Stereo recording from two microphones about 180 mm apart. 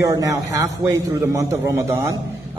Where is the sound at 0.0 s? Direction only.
20° right (ahead or behind).